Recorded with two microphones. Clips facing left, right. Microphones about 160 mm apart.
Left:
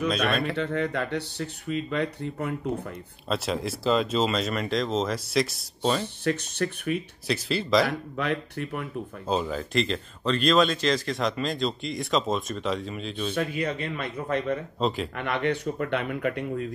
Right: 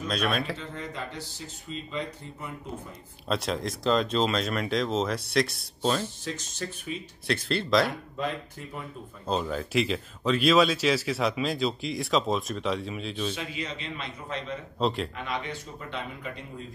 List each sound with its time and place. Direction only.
0.1 s speech: centre (ahead or behind)
0.6 s speech: 65° left (ahead or behind)
3.3 s speech: centre (ahead or behind)
6.2 s speech: 65° left (ahead or behind)
7.2 s speech: centre (ahead or behind)
8.2 s speech: 70° left (ahead or behind)
9.3 s speech: centre (ahead or behind)
13.3 s speech: 55° left (ahead or behind)
14.8 s speech: centre (ahead or behind)
15.1 s speech: 60° left (ahead or behind)